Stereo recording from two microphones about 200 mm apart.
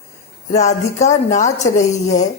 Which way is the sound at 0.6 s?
35° left (ahead or behind).